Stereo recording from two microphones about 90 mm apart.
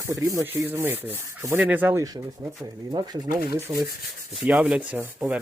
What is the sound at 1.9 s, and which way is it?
Sanding, 30° right (ahead or behind).